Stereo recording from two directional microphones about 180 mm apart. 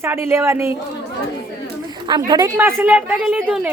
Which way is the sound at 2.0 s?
25° right (ahead or behind).